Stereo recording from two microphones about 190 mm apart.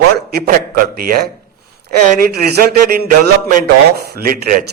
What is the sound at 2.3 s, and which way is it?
A man's voice, 55° right (ahead or behind).